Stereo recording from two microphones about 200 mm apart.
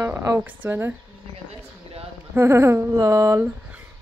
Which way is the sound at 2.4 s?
10° right (ahead or behind).